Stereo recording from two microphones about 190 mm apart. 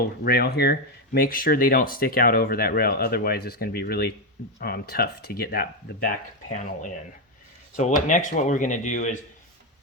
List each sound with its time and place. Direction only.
0.3 s speech: 55° left (ahead or behind); by 9.1 s 40° left (ahead or behind)